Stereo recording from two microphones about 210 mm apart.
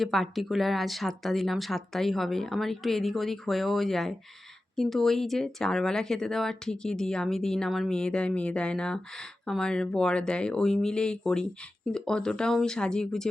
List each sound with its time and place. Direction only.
0.0 s speech: centre (ahead or behind)